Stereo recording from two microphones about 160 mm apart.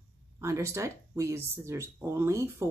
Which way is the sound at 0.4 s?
20° right (ahead or behind).